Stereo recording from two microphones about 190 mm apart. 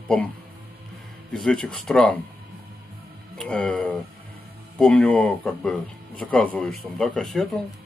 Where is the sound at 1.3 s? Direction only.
5° left (ahead or behind).